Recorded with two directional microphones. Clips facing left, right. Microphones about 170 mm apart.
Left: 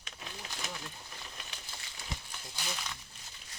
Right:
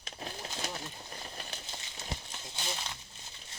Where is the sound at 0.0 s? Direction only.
40° right (ahead or behind).